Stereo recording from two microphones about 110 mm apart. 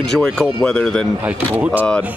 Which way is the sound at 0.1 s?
5° left (ahead or behind).